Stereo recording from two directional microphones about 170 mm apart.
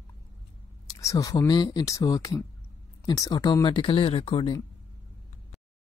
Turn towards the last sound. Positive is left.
turn(degrees=30)  # may be behind; listen again after turning